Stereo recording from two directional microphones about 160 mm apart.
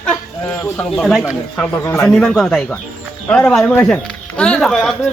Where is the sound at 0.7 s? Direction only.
5° left (ahead or behind).